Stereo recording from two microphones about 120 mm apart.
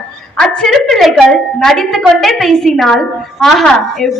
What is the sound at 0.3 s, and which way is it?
A woman's voice, 5° left (ahead or behind).